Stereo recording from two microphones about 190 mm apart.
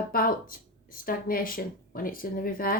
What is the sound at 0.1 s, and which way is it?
Speech, 50° left (ahead or behind).